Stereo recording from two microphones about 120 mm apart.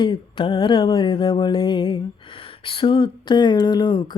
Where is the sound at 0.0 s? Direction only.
40° left (ahead or behind).